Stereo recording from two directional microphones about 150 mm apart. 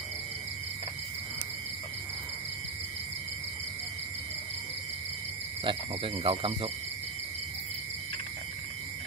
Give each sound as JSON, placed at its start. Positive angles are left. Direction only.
{"t": 5.6, "sound": "speech", "side_deg": -35}